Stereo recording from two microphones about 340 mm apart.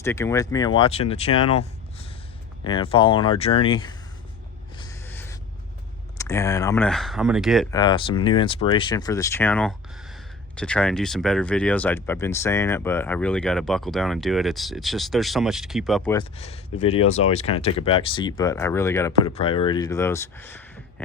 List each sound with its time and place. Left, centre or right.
0.0 s speech: centre
4.8 s a sound: centre
6.1 s speech: centre
7.7 s speech: centre
16.1 s speech: centre